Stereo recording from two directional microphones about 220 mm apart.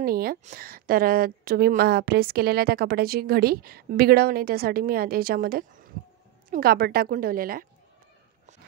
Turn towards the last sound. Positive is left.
turn(degrees=-40)  # may be behind; listen again after turning